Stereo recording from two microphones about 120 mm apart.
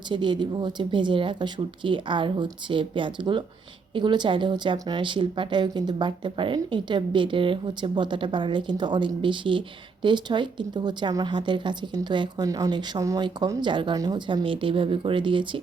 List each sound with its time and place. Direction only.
0.1 s speech: 40° right (ahead or behind)
14.3 s speech: 45° right (ahead or behind)